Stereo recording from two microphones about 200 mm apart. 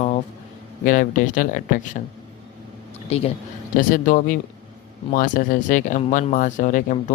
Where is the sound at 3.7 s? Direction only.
45° left (ahead or behind).